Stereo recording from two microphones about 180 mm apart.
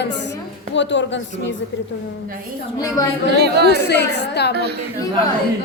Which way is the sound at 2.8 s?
20° left (ahead or behind).